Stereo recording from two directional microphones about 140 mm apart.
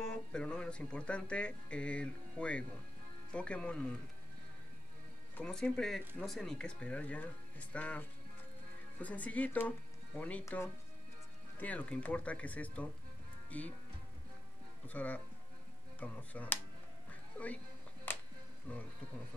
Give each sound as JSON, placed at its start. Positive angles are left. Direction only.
{"t": 0.0, "sound": "speech", "side_deg": 5}
{"t": 5.4, "sound": "speech", "side_deg": 5}
{"t": 9.0, "sound": "speech", "side_deg": 10}
{"t": 14.9, "sound": "speech", "side_deg": 10}
{"t": 18.1, "sound": "music", "side_deg": 15}
{"t": 18.7, "sound": "speech", "side_deg": 10}